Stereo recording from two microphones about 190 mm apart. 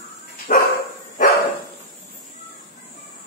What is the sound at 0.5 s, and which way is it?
Dog, 45° left (ahead or behind).